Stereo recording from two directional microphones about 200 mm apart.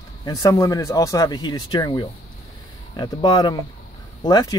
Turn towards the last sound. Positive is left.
turn(degrees=20)  # may be behind; listen again after turning